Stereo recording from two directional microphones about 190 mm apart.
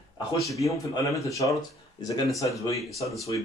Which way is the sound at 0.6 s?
15° left (ahead or behind).